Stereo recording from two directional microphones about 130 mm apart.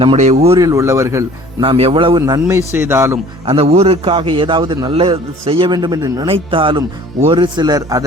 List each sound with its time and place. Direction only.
0.2 s a man's voice: 55° right (ahead or behind)
0.6 s a man's voice: 25° right (ahead or behind)
1.6 s a man's voice: 45° right (ahead or behind)
2.2 s a man's voice: 25° right (ahead or behind)
3.4 s a man's voice: 50° right (ahead or behind); by 4.9 s 35° right (ahead or behind)
4.9 s a man's voice: 45° right (ahead or behind); by 6.2 s 30° right (ahead or behind)
6.2 s a man's voice: 45° right (ahead or behind); by 8.0 s 30° right (ahead or behind)